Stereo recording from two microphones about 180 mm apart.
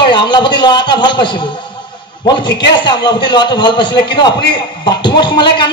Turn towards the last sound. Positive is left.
turn(degrees=25)  # may be behind; listen again after turning